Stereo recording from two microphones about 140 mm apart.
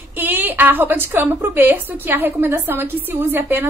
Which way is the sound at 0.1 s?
15° right (ahead or behind).